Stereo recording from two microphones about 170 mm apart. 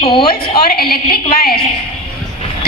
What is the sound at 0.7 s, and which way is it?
Speech, 65° left (ahead or behind).